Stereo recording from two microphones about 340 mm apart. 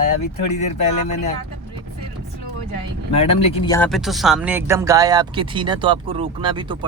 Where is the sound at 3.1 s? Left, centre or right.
Centre.